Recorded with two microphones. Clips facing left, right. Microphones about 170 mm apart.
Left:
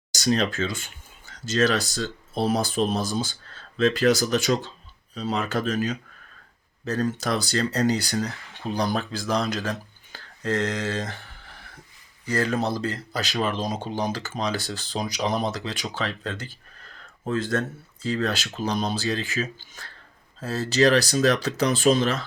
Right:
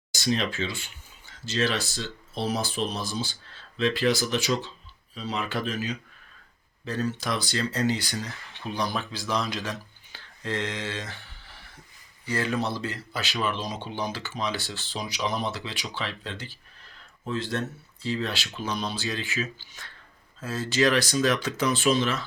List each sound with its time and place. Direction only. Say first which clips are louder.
0.3 s speech: left 4 dB; 40° left (ahead or behind)